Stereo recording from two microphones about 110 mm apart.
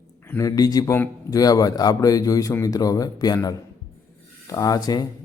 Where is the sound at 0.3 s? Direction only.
35° left (ahead or behind).